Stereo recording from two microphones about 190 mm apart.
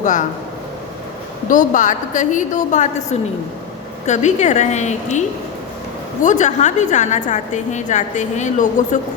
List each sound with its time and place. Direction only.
0.0 s a woman's voice: 40° left (ahead or behind)
1.5 s a woman's voice: 45° left (ahead or behind)
6.2 s a woman's voice: 40° left (ahead or behind)